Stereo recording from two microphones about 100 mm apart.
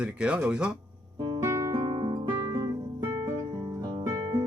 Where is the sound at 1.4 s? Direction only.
30° right (ahead or behind).